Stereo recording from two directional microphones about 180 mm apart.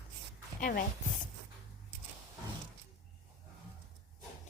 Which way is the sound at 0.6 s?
50° left (ahead or behind).